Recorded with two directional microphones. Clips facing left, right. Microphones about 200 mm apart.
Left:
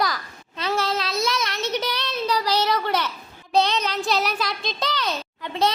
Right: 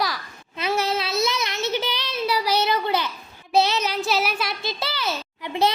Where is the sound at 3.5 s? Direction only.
5° right (ahead or behind).